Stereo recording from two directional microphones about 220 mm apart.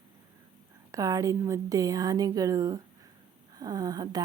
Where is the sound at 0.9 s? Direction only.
15° right (ahead or behind).